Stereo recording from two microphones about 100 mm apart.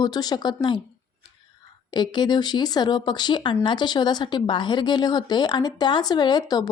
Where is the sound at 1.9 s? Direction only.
45° left (ahead or behind).